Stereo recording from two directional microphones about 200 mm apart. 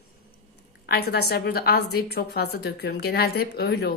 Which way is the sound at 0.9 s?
55° left (ahead or behind).